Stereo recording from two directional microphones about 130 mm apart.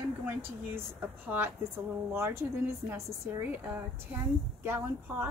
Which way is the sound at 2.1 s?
20° right (ahead or behind).